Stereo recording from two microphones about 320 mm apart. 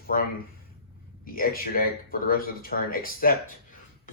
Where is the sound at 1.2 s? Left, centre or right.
Left.